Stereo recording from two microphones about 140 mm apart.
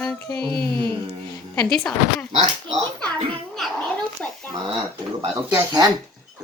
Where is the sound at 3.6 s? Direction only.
5° left (ahead or behind).